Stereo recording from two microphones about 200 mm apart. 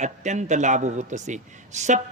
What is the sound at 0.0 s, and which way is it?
A man's voice, 35° right (ahead or behind).